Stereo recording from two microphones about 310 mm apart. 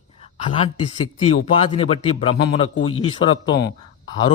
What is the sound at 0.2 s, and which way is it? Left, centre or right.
A man's voice, centre.